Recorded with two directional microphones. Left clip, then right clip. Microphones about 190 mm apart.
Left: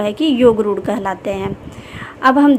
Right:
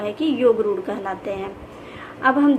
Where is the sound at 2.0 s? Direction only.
55° left (ahead or behind).